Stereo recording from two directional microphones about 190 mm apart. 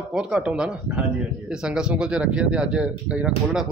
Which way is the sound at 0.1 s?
5° right (ahead or behind).